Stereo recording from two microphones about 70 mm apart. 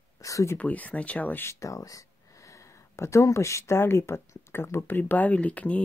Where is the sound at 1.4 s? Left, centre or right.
Left.